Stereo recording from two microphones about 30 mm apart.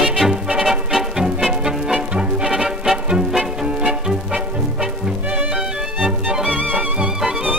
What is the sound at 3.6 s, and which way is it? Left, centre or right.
Music, right.